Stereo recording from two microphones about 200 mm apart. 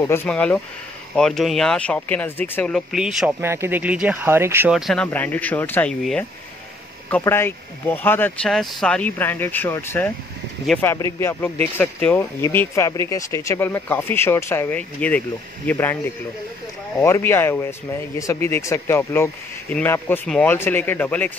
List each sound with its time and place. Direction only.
0.0 s speech: 10° left (ahead or behind)
17.0 s speech: 15° left (ahead or behind)